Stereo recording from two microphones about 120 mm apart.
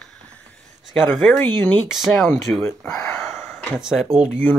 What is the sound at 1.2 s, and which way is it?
Speech, 15° left (ahead or behind).